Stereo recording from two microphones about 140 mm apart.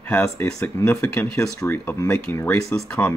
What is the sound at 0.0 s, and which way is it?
Speech, 15° left (ahead or behind).